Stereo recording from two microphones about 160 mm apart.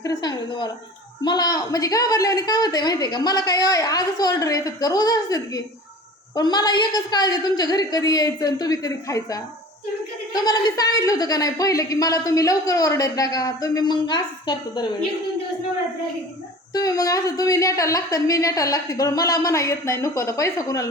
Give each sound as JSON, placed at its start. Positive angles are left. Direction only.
{"t": 0.0, "sound": "a sound", "side_deg": 25}
{"t": 1.2, "sound": "a woman's voice", "side_deg": 25}
{"t": 16.7, "sound": "a woman's voice", "side_deg": 25}